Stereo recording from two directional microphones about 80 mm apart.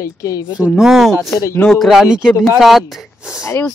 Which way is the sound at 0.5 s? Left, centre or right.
Centre.